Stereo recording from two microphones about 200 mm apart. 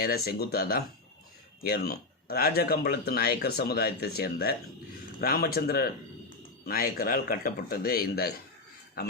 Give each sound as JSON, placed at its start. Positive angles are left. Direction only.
{"t": 0.0, "sound": "speech", "side_deg": 50}